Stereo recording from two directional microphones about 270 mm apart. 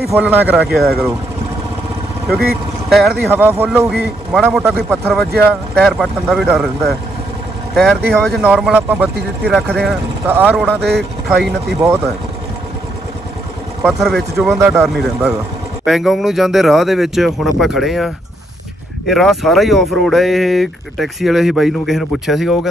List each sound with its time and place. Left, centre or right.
0.1 s speech: centre
2.9 s speech: centre
10.8 s speech: right
11.2 s speech: centre
13.8 s speech: centre